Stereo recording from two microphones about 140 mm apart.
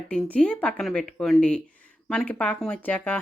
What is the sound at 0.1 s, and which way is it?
A woman's voice, 10° left (ahead or behind).